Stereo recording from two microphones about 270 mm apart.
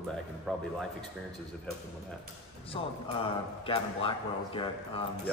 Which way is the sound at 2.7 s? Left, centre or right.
Centre.